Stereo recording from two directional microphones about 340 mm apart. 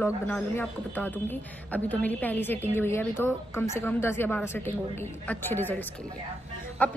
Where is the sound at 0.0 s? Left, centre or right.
Centre.